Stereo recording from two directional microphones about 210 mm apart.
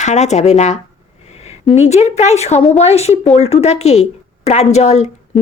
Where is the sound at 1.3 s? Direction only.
30° left (ahead or behind).